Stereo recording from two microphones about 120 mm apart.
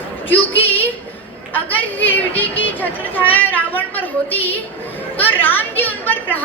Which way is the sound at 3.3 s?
15° left (ahead or behind).